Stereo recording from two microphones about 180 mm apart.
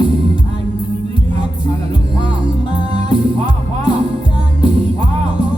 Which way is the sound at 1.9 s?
25° left (ahead or behind).